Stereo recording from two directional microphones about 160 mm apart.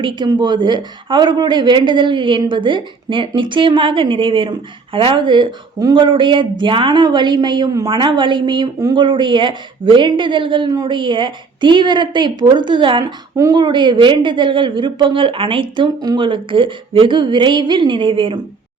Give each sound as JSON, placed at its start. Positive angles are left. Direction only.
{"t": 0.0, "sound": "a woman's voice", "side_deg": -30}